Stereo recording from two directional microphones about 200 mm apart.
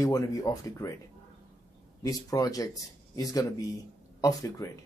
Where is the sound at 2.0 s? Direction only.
15° left (ahead or behind).